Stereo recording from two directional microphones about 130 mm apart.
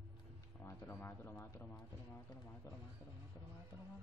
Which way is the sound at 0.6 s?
20° left (ahead or behind).